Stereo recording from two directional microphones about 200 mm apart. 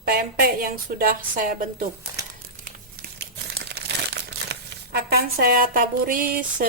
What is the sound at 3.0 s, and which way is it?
Crumpling, 55° right (ahead or behind).